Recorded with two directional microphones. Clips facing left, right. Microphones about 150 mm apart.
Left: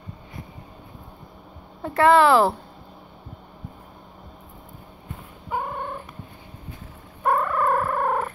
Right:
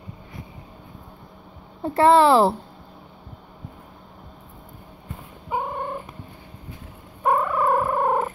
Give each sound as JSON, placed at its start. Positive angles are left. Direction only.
{"t": 1.8, "sound": "speech", "side_deg": -30}
{"t": 5.5, "sound": "cat", "side_deg": -5}
{"t": 7.2, "sound": "music", "side_deg": -10}